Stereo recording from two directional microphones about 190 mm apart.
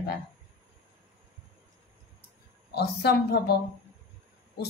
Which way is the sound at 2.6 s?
60° left (ahead or behind).